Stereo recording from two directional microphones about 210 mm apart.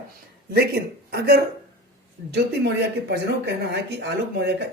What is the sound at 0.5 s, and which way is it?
Speech, 50° right (ahead or behind).